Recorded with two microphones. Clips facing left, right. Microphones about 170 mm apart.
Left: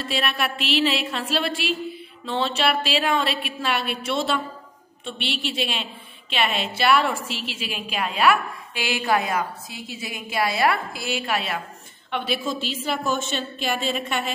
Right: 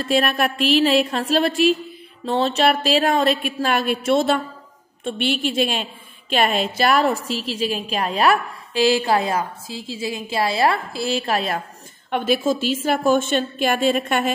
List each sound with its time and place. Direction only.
0.0 s a woman's voice: 45° right (ahead or behind)